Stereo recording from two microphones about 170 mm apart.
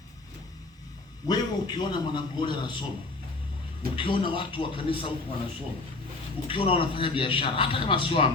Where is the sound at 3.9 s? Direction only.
30° left (ahead or behind).